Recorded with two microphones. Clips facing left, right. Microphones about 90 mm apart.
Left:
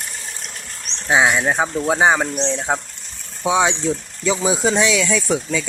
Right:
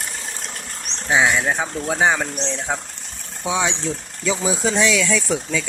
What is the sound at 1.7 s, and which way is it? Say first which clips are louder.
Speech: left 3 dB; 25° left (ahead or behind).